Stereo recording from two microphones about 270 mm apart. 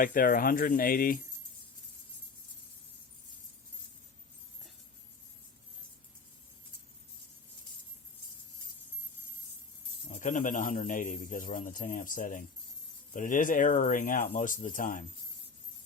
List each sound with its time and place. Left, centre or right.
0.0 s speech: left
10.1 s speech: left